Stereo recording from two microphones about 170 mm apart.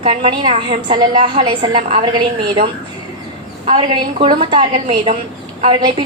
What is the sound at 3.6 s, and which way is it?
A woman's voice, 35° right (ahead or behind).